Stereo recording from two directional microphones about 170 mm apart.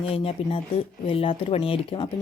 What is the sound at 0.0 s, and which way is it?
Speech, 35° left (ahead or behind).